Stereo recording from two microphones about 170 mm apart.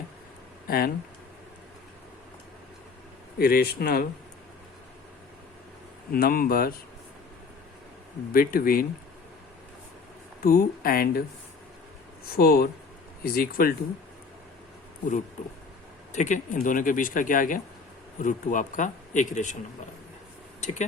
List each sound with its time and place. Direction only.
0.7 s speech: 60° left (ahead or behind)
3.3 s speech: 65° left (ahead or behind)
6.1 s speech: 60° left (ahead or behind)
8.3 s speech: 60° left (ahead or behind)
10.4 s speech: 55° left (ahead or behind)
12.3 s speech: 60° left (ahead or behind)
15.4 s speech: 45° left (ahead or behind)
20.6 s speech: 45° left (ahead or behind)